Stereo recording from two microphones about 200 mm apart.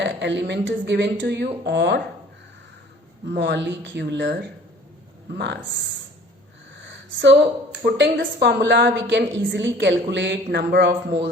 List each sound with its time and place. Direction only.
0.0 s a woman's voice: 60° right (ahead or behind)
3.2 s a woman's voice: 60° right (ahead or behind)
6.8 s a woman's voice: 65° right (ahead or behind)